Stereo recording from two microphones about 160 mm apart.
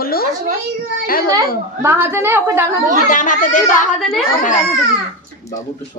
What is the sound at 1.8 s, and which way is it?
A woman's voice, 15° right (ahead or behind).